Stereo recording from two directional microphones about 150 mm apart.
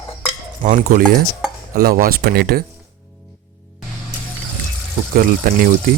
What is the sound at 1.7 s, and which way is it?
Speech, 80° right.